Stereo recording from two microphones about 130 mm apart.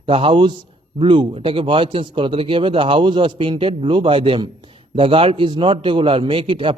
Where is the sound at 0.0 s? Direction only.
45° right (ahead or behind).